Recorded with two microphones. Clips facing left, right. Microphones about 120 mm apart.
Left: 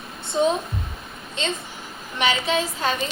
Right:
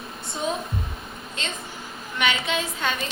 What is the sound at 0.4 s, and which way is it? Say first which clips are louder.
Speech: left 8 dB; 25° left (ahead or behind).